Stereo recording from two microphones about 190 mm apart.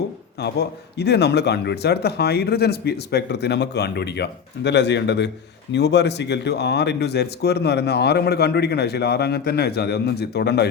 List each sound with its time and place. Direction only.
0.3 s speech: 60° left (ahead or behind)